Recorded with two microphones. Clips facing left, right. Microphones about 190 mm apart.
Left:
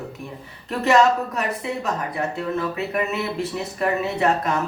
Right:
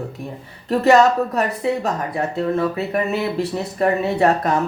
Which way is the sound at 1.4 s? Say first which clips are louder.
Right 6 dB; 35° right (ahead or behind).